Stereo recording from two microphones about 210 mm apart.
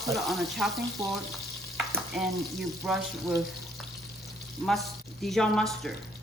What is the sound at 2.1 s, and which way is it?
Speech, centre (ahead or behind).